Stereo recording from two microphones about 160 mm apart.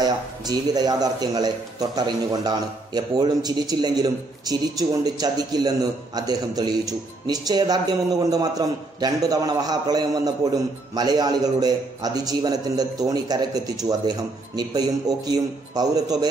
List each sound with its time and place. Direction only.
0.0 s a man's voice: 25° right (ahead or behind)